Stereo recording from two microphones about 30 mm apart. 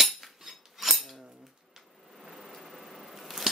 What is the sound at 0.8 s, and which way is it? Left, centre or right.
Cutlery, centre.